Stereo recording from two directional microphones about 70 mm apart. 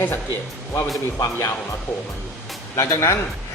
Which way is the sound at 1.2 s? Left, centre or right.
Left.